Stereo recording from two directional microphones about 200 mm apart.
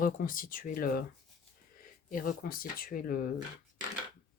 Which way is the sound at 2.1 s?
45° left (ahead or behind).